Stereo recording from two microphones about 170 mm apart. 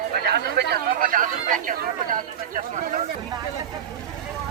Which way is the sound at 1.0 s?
50° right (ahead or behind).